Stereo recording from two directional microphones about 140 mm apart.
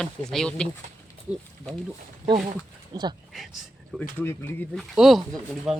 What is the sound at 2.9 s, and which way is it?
Speech, 30° right (ahead or behind).